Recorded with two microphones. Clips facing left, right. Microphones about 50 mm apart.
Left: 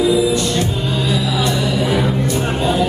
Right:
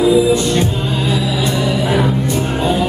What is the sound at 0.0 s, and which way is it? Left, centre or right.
Music, right.